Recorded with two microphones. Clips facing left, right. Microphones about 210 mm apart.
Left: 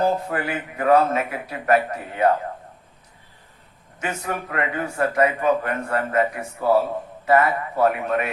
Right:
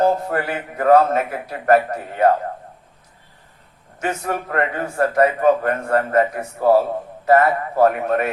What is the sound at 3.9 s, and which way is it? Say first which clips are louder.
A man's voice: right 4 dB; 40° right (ahead or behind).